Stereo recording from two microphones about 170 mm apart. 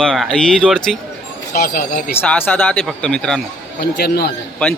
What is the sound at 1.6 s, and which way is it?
Speech, 60° left (ahead or behind).